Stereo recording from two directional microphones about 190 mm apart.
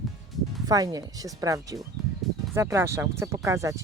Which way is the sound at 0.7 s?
20° right (ahead or behind).